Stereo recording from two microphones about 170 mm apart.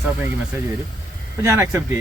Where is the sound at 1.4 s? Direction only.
15° right (ahead or behind).